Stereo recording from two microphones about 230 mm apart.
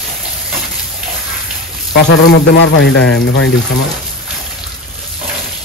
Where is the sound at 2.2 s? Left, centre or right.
Left.